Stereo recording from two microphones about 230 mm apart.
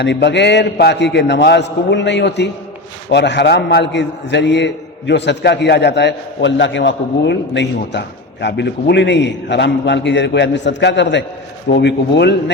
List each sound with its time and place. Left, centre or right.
0.0 s a man's voice: left